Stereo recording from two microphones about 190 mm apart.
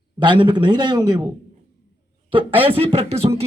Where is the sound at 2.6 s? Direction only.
30° right (ahead or behind).